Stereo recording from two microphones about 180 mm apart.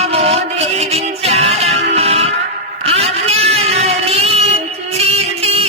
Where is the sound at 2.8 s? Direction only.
35° right (ahead or behind).